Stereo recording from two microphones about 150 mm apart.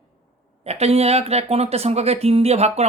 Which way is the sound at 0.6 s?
45° right (ahead or behind).